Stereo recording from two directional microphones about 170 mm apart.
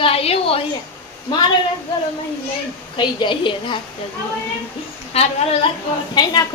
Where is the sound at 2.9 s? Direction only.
30° left (ahead or behind).